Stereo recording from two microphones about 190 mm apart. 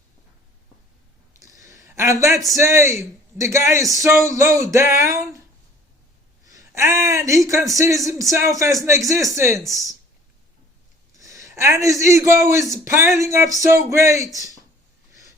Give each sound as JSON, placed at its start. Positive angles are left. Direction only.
{"t": 1.4, "sound": "a sound", "side_deg": -15}
{"t": 2.5, "sound": "speech", "side_deg": -15}
{"t": 6.5, "sound": "speech", "side_deg": -15}
{"t": 11.2, "sound": "a man's voice", "side_deg": -15}